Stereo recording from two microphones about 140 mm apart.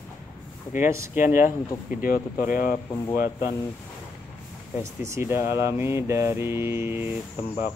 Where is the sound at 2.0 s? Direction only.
80° left.